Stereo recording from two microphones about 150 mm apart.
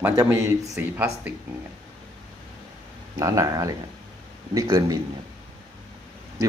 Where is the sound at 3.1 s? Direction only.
20° right (ahead or behind).